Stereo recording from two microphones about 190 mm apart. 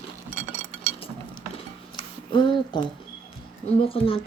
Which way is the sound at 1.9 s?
25° left (ahead or behind).